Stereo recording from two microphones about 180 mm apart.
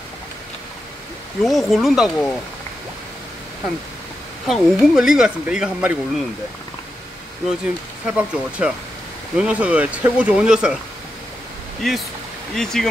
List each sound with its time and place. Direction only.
1.4 s speech: centre (ahead or behind)
4.5 s speech: centre (ahead or behind)
8.1 s speech: 5° right (ahead or behind)
11.8 s speech: centre (ahead or behind)